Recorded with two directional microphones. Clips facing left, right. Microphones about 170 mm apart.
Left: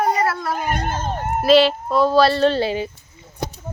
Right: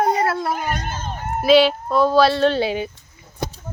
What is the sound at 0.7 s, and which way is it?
Speech, 55° left (ahead or behind).